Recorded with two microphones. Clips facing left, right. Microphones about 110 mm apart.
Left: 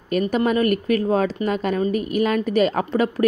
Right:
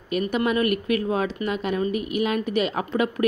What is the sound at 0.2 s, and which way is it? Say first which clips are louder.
A woman's voice: left 3 dB; 35° left (ahead or behind).